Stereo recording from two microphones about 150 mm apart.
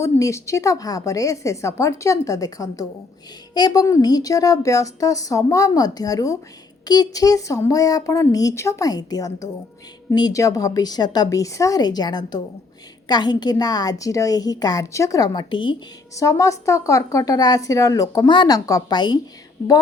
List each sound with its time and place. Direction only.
0.0 s a woman's voice: 20° left (ahead or behind)
16.1 s a woman's voice: 20° left (ahead or behind)